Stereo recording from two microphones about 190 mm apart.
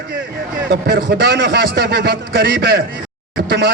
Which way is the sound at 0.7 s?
55° right (ahead or behind).